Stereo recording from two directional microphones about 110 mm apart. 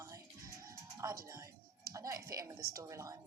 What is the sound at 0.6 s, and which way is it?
Music, 30° right (ahead or behind).